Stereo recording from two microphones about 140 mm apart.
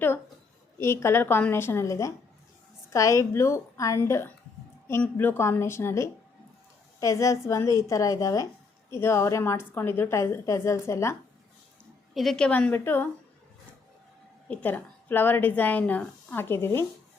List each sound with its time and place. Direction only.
0.8 s a woman's voice: 20° left (ahead or behind)
12.1 s a woman's voice: centre (ahead or behind)
14.4 s a woman's voice: 10° left (ahead or behind)